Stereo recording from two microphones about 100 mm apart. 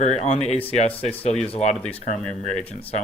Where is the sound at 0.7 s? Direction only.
80° left.